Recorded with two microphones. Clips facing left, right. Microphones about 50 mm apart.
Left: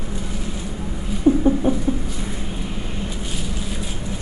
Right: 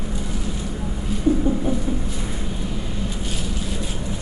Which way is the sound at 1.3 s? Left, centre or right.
Left.